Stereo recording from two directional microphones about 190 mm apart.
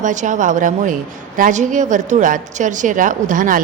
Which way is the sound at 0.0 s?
40° right (ahead or behind).